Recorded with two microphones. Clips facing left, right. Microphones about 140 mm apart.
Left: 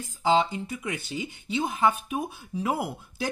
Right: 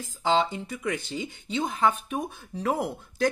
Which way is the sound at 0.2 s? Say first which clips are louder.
Left 1 dB; 5° left (ahead or behind).